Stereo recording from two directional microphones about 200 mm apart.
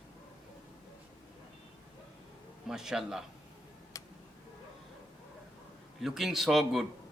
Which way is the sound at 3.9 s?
15° left (ahead or behind).